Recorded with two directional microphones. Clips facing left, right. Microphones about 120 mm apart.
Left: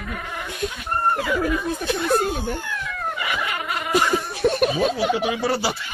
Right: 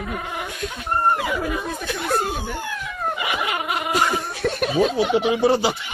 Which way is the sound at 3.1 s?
20° right (ahead or behind).